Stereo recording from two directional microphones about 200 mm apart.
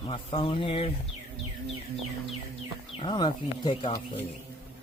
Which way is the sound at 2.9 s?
25° left (ahead or behind).